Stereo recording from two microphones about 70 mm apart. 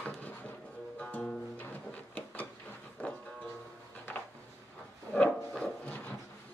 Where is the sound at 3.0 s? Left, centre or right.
Centre.